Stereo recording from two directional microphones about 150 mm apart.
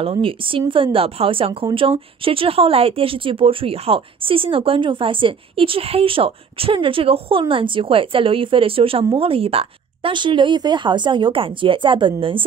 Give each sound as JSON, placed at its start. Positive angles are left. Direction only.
{"t": 0.0, "sound": "speech", "side_deg": -40}